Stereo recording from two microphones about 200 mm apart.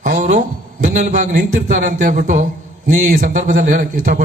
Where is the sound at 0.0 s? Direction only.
35° right (ahead or behind).